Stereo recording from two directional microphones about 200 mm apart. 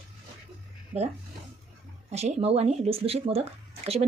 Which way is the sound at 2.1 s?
30° right (ahead or behind).